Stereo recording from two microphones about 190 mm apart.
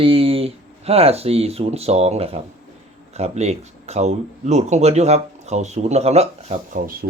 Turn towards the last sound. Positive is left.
turn(degrees=-35)  # may be behind; listen again after turning